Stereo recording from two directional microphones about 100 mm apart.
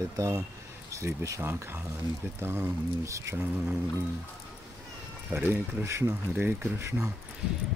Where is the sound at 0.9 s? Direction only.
30° right (ahead or behind).